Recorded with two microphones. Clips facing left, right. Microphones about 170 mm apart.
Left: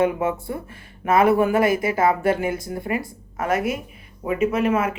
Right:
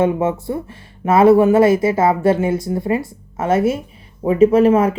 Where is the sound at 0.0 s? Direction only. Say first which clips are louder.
Right 4 dB; 25° right (ahead or behind).